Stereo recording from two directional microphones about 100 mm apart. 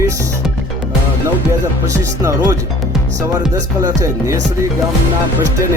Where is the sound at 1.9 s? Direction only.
35° right (ahead or behind).